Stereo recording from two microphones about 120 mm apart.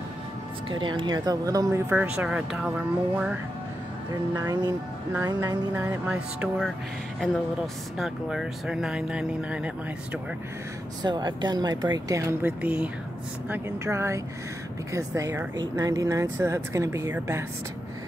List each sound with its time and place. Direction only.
0.7 s speech: 45° right (ahead or behind); by 2.2 s 20° right (ahead or behind)
2.2 s speech: 5° right (ahead or behind)
4.5 s speech: 35° right (ahead or behind)
6.0 s music: 10° right (ahead or behind)
7.2 s speech: centre (ahead or behind)
11.0 s speech: 35° right (ahead or behind)